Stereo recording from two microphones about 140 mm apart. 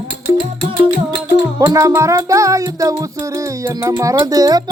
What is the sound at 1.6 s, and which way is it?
Music, 25° right (ahead or behind).